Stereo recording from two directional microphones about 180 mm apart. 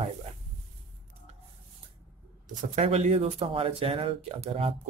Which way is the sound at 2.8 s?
40° right (ahead or behind).